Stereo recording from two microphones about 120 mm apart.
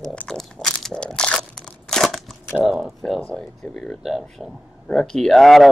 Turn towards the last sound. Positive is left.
turn(degrees=0)  # may be behind; listen again after turning